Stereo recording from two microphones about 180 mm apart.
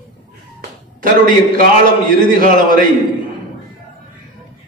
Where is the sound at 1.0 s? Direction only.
50° right (ahead or behind).